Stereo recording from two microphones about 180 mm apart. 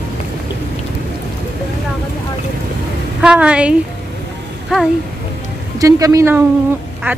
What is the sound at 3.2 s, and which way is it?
Speech, 5° right (ahead or behind).